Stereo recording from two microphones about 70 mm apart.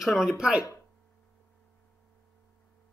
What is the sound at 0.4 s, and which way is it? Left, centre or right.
Speech, centre.